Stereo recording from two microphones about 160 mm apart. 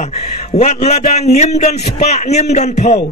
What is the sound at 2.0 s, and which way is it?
Speech, 45° left (ahead or behind).